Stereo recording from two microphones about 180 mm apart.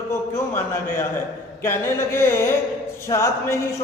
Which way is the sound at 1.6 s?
15° left (ahead or behind).